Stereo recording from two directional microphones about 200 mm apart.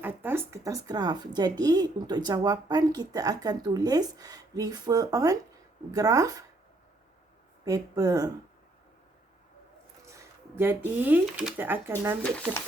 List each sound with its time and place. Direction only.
0.0 s speech: 10° right (ahead or behind)
7.6 s speech: 20° right (ahead or behind)
10.1 s speech: 10° right (ahead or behind)